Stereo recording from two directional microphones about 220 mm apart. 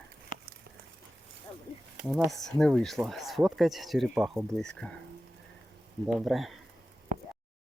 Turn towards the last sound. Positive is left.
turn(degrees=-40)  # may be behind; listen again after turning